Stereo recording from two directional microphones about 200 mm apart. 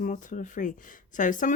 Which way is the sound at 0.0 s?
40° left (ahead or behind).